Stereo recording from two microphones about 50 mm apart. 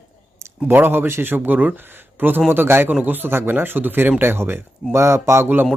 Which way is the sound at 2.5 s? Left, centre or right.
Right.